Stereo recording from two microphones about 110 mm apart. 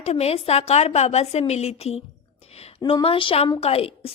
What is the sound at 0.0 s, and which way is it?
A woman's voice, 70° left (ahead or behind).